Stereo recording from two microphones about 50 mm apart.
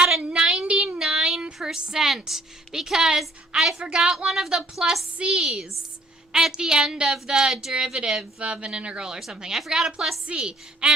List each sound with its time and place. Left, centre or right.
0.2 s a sound: right
0.6 s child singing: right
0.9 s a sound: centre
1.6 s speech: centre
5.1 s speech: right
5.4 s a woman's voice: centre